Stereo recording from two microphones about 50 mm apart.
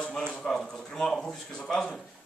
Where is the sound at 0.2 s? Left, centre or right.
Centre.